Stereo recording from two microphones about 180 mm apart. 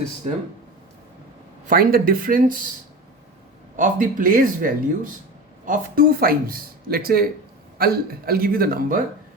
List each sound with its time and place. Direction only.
1.6 s speech: 55° right (ahead or behind)
3.8 s speech: 50° right (ahead or behind)